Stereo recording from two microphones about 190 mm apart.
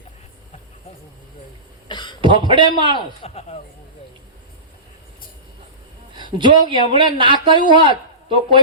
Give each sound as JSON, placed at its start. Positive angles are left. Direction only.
{"t": 1.9, "sound": "cough", "side_deg": 25}
{"t": 2.2, "sound": "speech", "side_deg": -25}
{"t": 3.2, "sound": "speech", "side_deg": 35}
{"t": 6.1, "sound": "a man's voice", "side_deg": -25}